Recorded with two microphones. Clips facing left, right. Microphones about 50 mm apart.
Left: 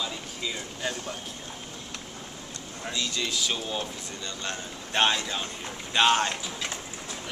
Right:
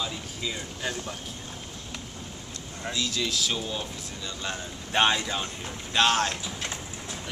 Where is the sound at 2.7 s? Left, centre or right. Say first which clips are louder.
Right 1 dB; centre.